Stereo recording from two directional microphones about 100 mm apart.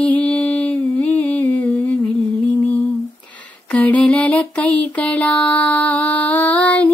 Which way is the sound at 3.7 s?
15° left (ahead or behind).